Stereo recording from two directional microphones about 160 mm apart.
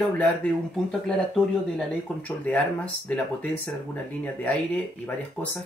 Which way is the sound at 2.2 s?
10° left (ahead or behind).